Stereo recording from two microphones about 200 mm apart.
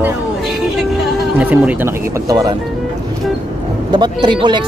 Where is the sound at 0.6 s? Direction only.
5° right (ahead or behind).